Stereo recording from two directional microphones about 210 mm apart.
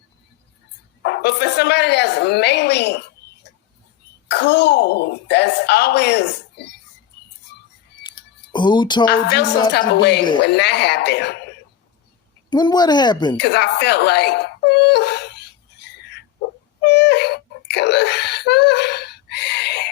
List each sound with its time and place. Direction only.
1.0 s a woman's voice: 50° left (ahead or behind)
4.3 s a woman's voice: 55° left (ahead or behind)
8.0 s a sound: 65° left (ahead or behind)
8.5 s speech: 20° left (ahead or behind)
9.0 s a woman's voice: 55° left (ahead or behind)
12.5 s speech: 20° left (ahead or behind)
13.3 s wail: 55° left (ahead or behind)